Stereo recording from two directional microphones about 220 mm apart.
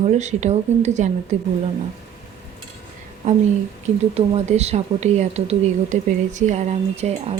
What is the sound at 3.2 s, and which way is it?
A woman's voice, 30° right (ahead or behind).